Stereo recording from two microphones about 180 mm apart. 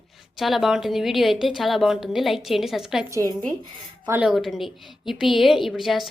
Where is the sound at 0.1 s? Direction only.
Centre (ahead or behind).